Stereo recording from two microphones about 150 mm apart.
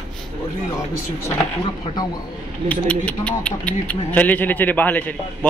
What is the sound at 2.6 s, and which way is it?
Speech, 10° left (ahead or behind).